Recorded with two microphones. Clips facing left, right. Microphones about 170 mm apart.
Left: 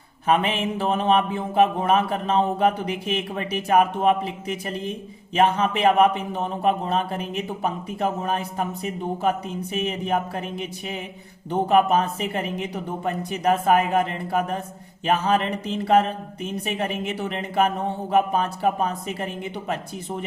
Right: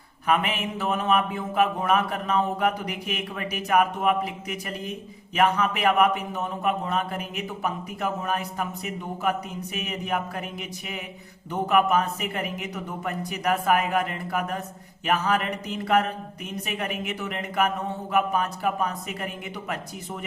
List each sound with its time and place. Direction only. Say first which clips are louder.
0.3 s speech: left 3 dB; 30° left (ahead or behind)